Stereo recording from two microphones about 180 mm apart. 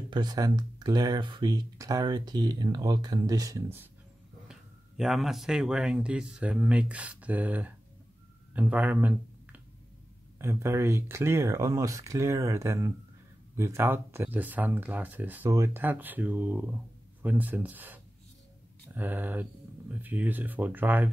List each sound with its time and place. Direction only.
0.1 s speech: 25° right (ahead or behind)
4.5 s speech: centre (ahead or behind)